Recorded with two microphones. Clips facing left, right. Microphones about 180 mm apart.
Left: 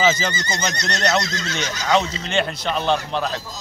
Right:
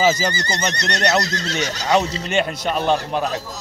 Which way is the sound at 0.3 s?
35° right (ahead or behind).